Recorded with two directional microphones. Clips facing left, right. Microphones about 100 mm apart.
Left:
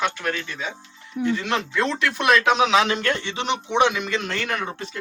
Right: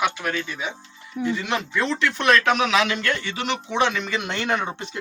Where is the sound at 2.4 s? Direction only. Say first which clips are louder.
Left 2 dB; 20° left (ahead or behind).